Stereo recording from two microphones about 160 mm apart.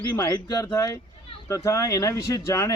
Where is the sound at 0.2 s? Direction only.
25° left (ahead or behind).